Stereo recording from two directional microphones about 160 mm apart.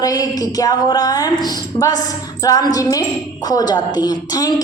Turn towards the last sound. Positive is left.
turn(degrees=25)  # may be behind; listen again after turning